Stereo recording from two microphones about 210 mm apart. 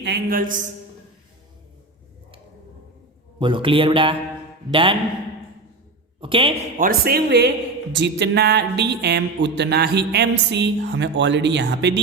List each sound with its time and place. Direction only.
0.0 s speech: 50° right (ahead or behind)
3.3 s a man's voice: 25° right (ahead or behind)
6.1 s speech: 25° right (ahead or behind)
6.7 s speech: 45° right (ahead or behind)